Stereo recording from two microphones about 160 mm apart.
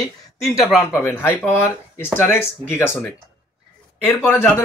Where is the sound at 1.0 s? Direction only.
10° left (ahead or behind).